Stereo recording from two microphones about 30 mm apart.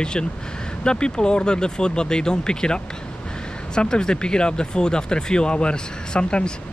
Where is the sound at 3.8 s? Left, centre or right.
Left.